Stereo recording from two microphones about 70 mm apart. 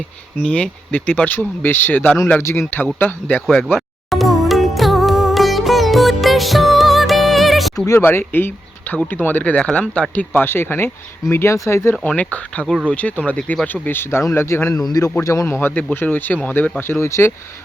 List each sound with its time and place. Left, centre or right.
0.4 s speech: centre
2.4 s speech: left
2.6 s speech: left
3.6 s music: centre
7.9 s speech: left
10.3 s speech: left
12.0 s speech: centre
13.8 s speech: left
14.8 s speech: left
15.2 s speech: left
15.4 s speech: left
16.8 s speech: left